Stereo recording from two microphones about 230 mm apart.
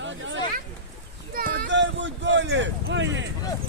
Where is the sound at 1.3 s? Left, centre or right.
Right.